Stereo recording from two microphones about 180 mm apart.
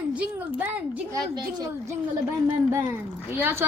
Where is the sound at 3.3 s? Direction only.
10° right (ahead or behind).